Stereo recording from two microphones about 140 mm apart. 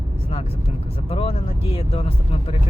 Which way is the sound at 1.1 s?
45° left (ahead or behind).